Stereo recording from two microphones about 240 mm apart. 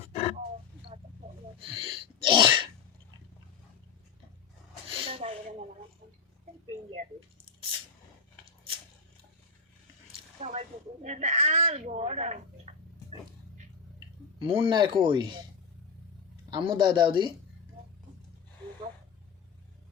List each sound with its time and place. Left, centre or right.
0.1 s wild animals: left
1.5 s sneeze: right
4.9 s a sound: right
10.4 s a sound: right
14.3 s speech: right
16.5 s speech: centre